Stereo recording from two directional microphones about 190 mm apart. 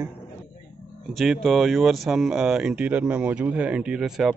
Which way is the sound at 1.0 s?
Centre (ahead or behind).